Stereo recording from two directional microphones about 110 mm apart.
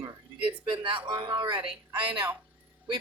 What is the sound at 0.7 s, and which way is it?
Speech, 50° right (ahead or behind).